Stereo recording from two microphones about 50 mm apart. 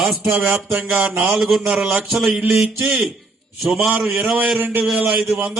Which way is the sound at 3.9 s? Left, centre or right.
Right.